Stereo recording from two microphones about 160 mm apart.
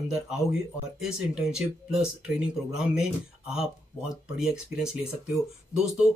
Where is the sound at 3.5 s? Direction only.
5° right (ahead or behind).